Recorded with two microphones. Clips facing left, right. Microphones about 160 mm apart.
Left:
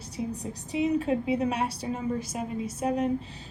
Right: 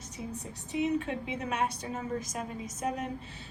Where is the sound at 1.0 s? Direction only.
35° left (ahead or behind).